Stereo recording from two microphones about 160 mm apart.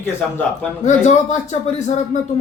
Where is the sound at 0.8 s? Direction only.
50° left (ahead or behind).